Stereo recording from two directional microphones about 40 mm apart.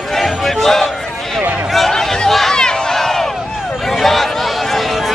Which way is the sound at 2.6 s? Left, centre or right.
Centre.